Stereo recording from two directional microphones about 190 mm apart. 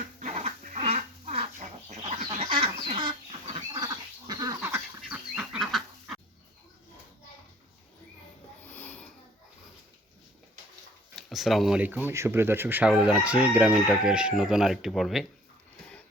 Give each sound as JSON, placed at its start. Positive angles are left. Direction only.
{"t": 0.2, "sound": "dog", "side_deg": -35}
{"t": 4.3, "sound": "duck", "side_deg": -20}
{"t": 8.6, "sound": "a sound", "side_deg": 10}
{"t": 11.1, "sound": "speech", "side_deg": 0}
{"t": 12.9, "sound": "crowing", "side_deg": -5}